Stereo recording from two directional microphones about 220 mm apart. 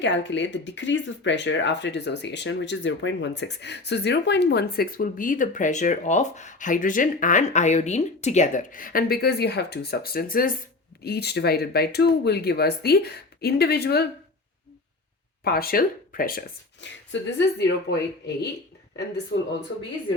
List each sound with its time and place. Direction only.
0.0 s speech: 55° left (ahead or behind)
15.4 s speech: 45° left (ahead or behind)
16.8 s speech: 55° left (ahead or behind)
19.3 s speech: 50° left (ahead or behind)